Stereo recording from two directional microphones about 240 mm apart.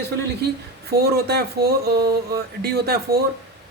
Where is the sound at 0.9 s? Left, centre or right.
Right.